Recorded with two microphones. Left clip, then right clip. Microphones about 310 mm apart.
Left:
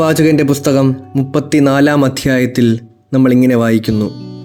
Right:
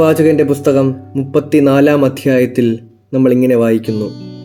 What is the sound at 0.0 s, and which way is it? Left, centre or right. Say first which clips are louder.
Speech: right 1 dB; left.